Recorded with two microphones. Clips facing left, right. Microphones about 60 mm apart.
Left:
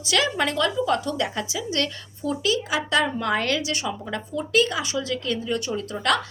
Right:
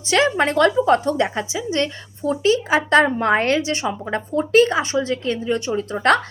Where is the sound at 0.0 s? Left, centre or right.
Right.